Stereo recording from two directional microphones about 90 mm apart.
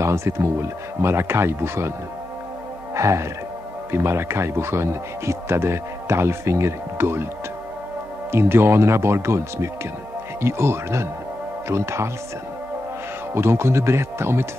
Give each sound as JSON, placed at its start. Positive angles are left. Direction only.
{"t": 0.0, "sound": "speech", "side_deg": -30}
{"t": 2.9, "sound": "music", "side_deg": -35}
{"t": 3.9, "sound": "speech", "side_deg": -25}
{"t": 8.3, "sound": "speech", "side_deg": -25}
{"t": 13.3, "sound": "speech", "side_deg": -30}